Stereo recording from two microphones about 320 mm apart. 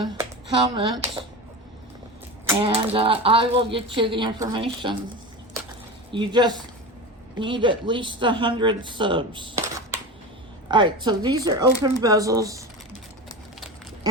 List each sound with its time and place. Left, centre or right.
0.7 s speech: centre
2.5 s speech: centre
6.1 s speech: centre